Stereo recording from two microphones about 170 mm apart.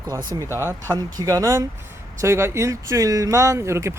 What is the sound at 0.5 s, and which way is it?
Speech, 15° right (ahead or behind).